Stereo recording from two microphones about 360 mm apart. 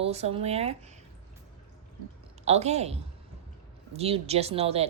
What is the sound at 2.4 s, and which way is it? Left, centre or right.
Speech, centre.